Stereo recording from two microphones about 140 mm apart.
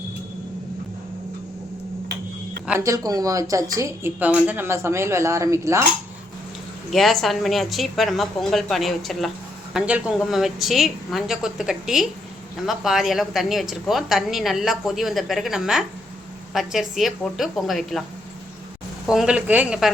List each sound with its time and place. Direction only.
2.7 s speech: 25° right (ahead or behind)
4.2 s speech: 10° right (ahead or behind)
6.9 s a woman's voice: centre (ahead or behind)
19.0 s a woman's voice: 5° right (ahead or behind)